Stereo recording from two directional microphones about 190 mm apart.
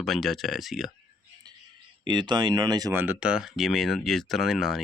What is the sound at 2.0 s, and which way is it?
Speech, 25° right (ahead or behind).